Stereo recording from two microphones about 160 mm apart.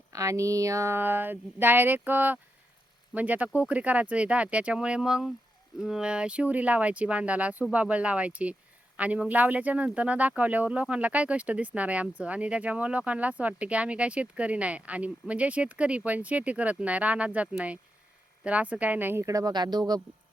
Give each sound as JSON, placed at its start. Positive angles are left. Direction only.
{"t": 0.1, "sound": "speech", "side_deg": -20}